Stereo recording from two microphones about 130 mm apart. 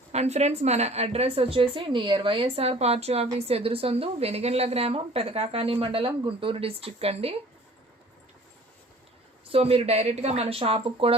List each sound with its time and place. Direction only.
0.1 s a woman's voice: 55° right (ahead or behind)
9.5 s a woman's voice: 50° right (ahead or behind)